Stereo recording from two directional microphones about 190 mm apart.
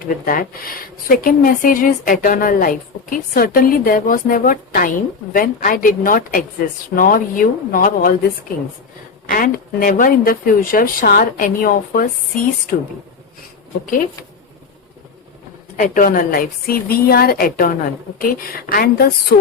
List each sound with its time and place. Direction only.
0.0 s a woman's voice: 50° left (ahead or behind)
9.2 s a woman's voice: 50° left (ahead or behind)
15.8 s a woman's voice: 45° left (ahead or behind)